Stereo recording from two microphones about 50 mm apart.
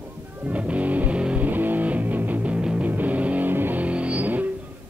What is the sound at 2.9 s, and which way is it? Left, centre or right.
Music, right.